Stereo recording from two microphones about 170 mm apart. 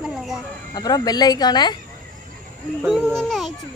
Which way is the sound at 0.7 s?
25° left (ahead or behind).